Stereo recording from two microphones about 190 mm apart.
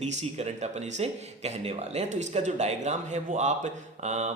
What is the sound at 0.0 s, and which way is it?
A man's voice, 35° right (ahead or behind).